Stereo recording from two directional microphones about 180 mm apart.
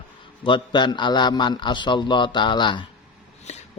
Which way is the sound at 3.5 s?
40° left (ahead or behind).